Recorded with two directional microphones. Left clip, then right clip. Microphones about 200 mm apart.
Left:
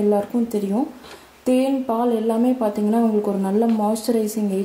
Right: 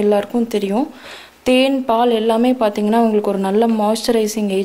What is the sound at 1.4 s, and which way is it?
Speech, centre (ahead or behind).